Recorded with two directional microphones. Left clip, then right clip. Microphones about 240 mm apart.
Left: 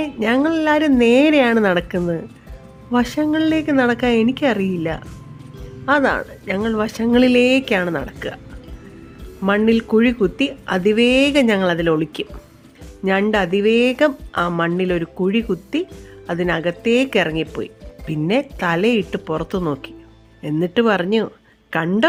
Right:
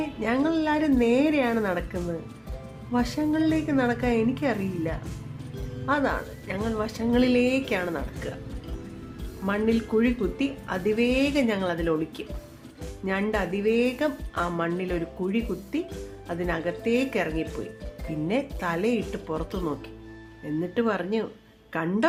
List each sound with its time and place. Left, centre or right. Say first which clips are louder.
0.0 s speech: left 8 dB; left
9.5 s speech: left 9 dB; left